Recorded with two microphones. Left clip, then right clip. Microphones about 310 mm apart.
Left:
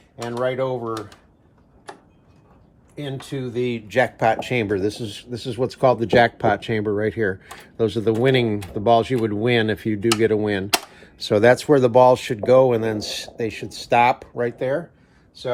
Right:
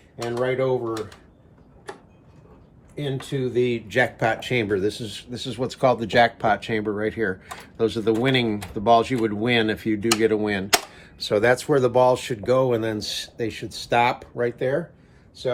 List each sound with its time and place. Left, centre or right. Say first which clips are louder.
0.4 s speech: even; left
1.9 s a sound: right 1 dB; centre
2.9 s speech: right 2 dB; centre